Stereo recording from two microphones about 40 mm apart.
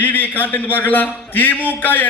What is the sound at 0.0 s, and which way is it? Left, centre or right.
A man's voice, left.